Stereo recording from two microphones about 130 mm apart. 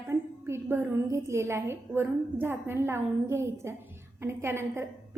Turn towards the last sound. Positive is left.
turn(degrees=-20)  # may be behind; listen again after turning